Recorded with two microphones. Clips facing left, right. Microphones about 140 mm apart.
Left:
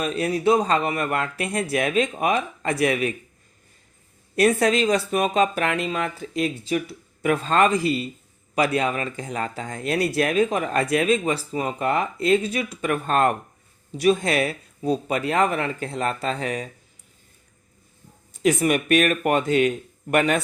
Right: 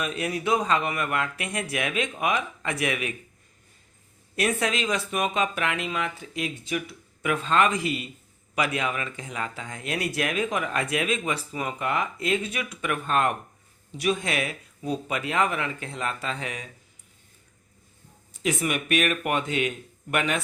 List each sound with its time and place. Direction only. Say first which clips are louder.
0.0 s speech: left 6 dB; 35° left (ahead or behind)
4.4 s speech: left 7 dB; 35° left (ahead or behind)
18.4 s speech: left 7 dB; 40° left (ahead or behind)